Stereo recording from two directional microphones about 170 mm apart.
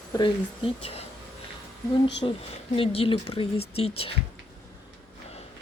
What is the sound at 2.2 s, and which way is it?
Speech, 30° left (ahead or behind).